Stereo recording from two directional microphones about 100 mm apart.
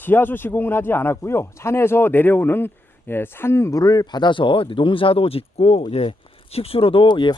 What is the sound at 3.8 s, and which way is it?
Speech, 40° left (ahead or behind).